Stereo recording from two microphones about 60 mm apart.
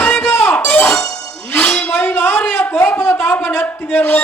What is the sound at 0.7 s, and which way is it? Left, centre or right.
Music, centre.